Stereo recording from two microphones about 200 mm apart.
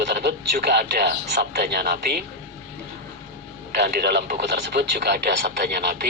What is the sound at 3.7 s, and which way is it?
Speech, 55° right (ahead or behind).